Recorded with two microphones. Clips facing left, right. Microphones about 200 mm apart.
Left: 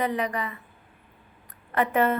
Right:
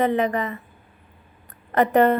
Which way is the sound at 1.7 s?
40° right (ahead or behind).